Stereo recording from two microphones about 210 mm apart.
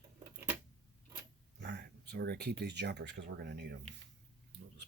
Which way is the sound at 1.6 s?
55° right (ahead or behind).